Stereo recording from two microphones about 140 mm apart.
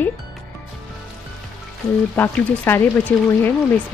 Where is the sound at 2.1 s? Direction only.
15° left (ahead or behind).